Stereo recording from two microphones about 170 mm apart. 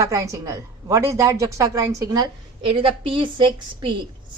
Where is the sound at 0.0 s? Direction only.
20° right (ahead or behind).